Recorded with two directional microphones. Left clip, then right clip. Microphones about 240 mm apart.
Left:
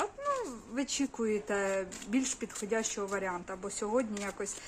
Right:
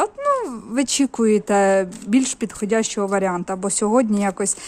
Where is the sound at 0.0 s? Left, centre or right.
Right.